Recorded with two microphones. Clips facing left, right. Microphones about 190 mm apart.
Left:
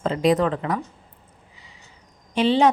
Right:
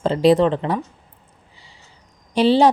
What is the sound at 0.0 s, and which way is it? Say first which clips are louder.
Speech: right 5 dB; 30° right (ahead or behind).